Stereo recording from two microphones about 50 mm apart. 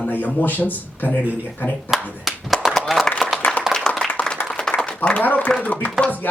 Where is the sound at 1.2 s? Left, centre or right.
Right.